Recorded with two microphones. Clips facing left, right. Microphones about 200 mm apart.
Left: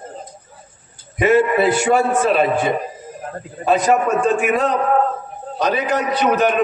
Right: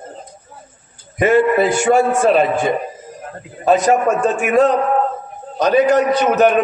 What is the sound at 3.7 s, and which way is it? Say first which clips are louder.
A man's voice: right 2 dB; 45° right (ahead or behind).